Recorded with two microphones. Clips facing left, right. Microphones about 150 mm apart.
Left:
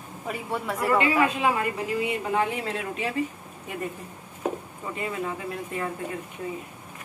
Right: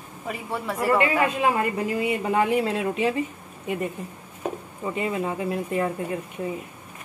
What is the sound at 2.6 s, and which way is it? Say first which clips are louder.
Speech: right 6 dB; 30° right (ahead or behind).